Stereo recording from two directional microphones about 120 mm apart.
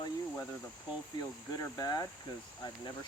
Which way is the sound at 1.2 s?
30° left (ahead or behind).